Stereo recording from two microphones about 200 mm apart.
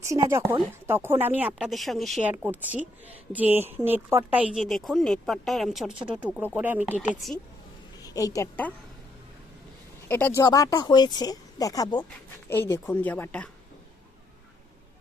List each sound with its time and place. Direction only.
0.0 s speech: 15° right (ahead or behind)
8.0 s a woman's voice: 15° left (ahead or behind)
10.1 s speech: 10° left (ahead or behind)